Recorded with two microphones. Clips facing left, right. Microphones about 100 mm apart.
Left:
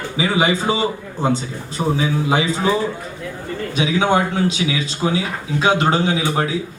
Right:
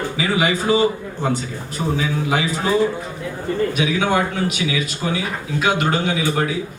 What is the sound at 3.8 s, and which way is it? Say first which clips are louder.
A man's voice: left 6 dB; 30° left (ahead or behind).